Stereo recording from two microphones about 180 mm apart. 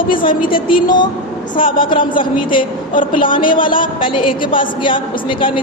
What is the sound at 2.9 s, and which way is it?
Speech, 50° left (ahead or behind).